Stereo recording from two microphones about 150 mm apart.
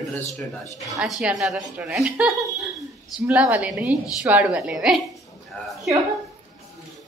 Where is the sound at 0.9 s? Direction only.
Centre (ahead or behind).